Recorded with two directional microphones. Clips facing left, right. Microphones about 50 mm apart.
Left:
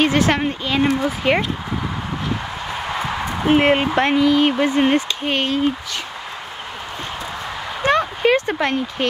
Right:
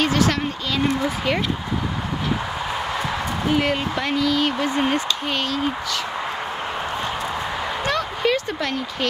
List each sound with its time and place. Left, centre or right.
0.0 s speech: left
3.4 s speech: left
7.8 s a sound: left